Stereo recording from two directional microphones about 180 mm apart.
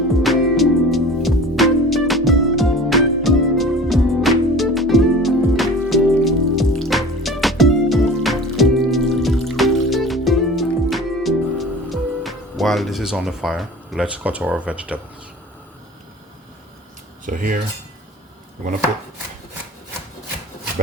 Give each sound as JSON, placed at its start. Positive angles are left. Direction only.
{"t": 0.2, "sound": "music", "side_deg": 0}
{"t": 17.2, "sound": "cutlery", "side_deg": -50}